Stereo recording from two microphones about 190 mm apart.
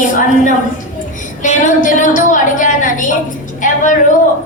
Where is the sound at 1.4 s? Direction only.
40° left (ahead or behind).